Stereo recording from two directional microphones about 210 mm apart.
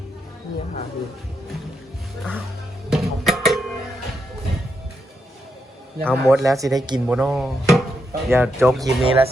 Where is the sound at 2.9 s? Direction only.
Centre (ahead or behind).